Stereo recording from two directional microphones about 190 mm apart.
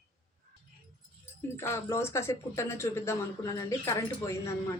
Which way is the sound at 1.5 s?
15° left (ahead or behind).